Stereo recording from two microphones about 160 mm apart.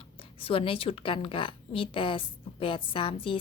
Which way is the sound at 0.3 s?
35° left (ahead or behind).